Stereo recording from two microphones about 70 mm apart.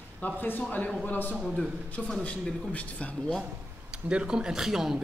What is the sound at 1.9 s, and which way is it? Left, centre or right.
Speech, centre.